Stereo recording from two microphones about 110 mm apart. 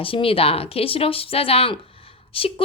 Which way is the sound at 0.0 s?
55° left (ahead or behind).